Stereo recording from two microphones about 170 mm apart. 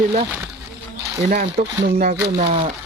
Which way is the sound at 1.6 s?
45° right (ahead or behind).